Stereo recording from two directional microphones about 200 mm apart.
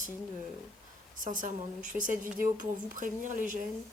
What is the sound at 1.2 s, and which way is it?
A woman's voice, 40° right (ahead or behind).